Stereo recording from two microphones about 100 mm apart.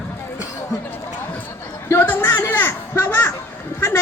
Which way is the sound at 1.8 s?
20° left (ahead or behind).